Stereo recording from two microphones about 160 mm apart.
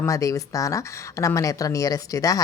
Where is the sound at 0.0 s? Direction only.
20° left (ahead or behind).